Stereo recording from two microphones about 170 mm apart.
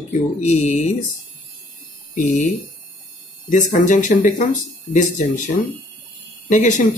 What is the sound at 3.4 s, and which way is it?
Speech, 45° left (ahead or behind).